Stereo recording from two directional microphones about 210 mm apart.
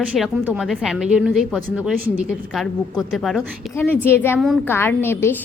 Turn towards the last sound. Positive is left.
turn(degrees=10)  # may be behind; listen again after turning